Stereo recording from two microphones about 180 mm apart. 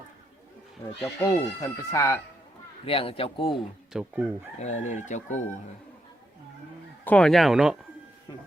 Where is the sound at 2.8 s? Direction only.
30° left (ahead or behind).